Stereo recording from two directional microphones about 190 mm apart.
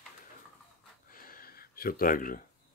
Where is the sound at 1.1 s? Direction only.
50° left (ahead or behind).